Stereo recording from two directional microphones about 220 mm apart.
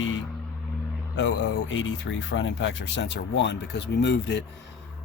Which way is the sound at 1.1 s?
60° left (ahead or behind).